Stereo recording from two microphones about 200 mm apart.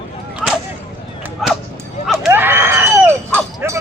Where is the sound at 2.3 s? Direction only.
10° right (ahead or behind).